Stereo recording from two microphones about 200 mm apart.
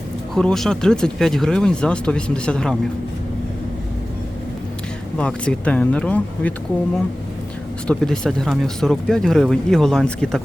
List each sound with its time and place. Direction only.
0.3 s speech: centre (ahead or behind)
5.1 s speech: 5° left (ahead or behind)
7.9 s speech: 5° left (ahead or behind)